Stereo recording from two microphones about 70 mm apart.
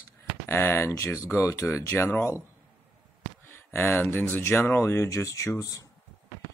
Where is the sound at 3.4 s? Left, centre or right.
Left.